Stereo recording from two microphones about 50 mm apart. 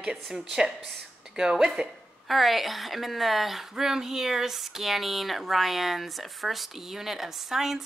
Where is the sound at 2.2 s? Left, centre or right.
Centre.